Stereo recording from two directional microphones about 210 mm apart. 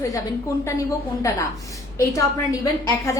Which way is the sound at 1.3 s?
15° left (ahead or behind).